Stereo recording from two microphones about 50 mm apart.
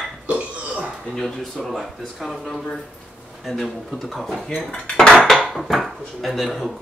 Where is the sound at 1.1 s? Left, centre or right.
Centre.